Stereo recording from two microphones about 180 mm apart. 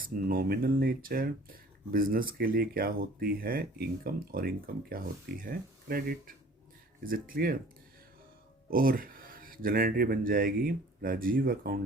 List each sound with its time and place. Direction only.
0.0 s speech: 55° right (ahead or behind)
8.7 s speech: 55° right (ahead or behind)